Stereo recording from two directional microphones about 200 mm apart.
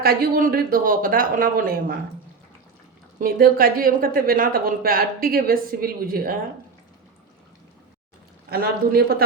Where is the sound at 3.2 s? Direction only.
45° right (ahead or behind).